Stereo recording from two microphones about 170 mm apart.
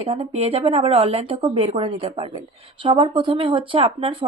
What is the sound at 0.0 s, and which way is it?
Speech, 35° right (ahead or behind).